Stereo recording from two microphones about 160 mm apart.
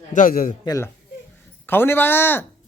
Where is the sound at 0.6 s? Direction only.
20° left (ahead or behind).